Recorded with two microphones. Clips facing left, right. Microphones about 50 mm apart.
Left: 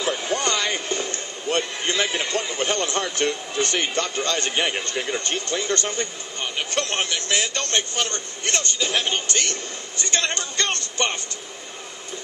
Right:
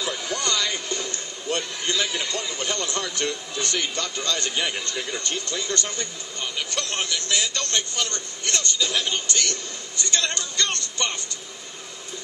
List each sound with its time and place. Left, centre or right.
0.0 s a man's voice: left